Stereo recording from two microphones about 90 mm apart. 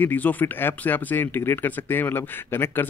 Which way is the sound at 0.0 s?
20° left (ahead or behind).